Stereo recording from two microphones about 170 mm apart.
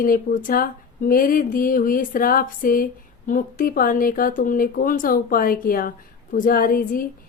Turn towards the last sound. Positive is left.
turn(degrees=55)  # may be behind; listen again after turning